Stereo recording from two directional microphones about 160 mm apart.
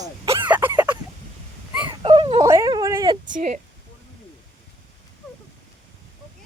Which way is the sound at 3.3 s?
50° right (ahead or behind).